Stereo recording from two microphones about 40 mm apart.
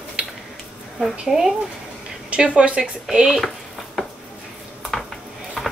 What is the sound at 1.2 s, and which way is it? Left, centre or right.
Speech, centre.